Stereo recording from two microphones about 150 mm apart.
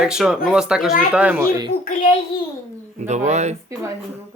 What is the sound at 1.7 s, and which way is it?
Speech, 60° left (ahead or behind).